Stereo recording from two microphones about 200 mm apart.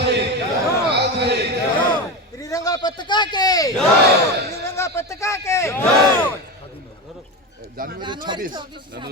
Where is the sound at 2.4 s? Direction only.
15° left (ahead or behind).